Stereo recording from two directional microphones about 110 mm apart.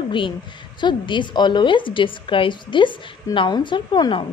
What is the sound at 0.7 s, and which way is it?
A woman's voice, 45° left (ahead or behind).